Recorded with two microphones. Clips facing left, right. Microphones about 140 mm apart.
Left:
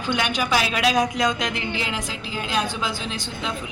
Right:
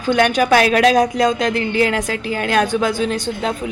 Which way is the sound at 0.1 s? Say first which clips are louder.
Right 9 dB; 50° right (ahead or behind).